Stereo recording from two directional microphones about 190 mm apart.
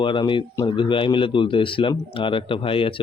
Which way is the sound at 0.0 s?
25° left (ahead or behind).